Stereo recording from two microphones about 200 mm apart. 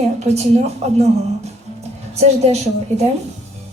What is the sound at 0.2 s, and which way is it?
A man's voice, 35° right (ahead or behind).